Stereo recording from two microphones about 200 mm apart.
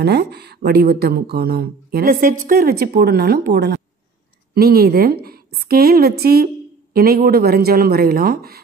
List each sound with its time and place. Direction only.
0.0 s a woman's voice: 55° right (ahead or behind)